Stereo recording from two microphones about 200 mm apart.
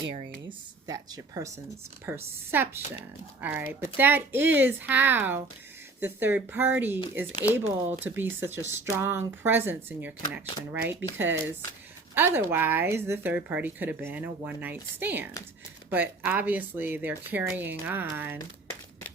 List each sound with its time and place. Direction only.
0.9 s a woman's voice: 20° right (ahead or behind)